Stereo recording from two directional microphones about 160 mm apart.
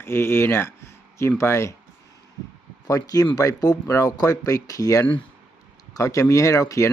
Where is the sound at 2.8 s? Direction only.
20° left (ahead or behind).